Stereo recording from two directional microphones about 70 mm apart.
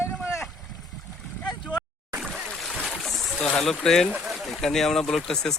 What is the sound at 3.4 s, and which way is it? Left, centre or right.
Speech, centre.